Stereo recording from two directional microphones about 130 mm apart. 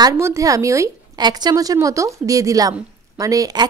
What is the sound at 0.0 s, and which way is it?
A woman's voice, 25° right (ahead or behind).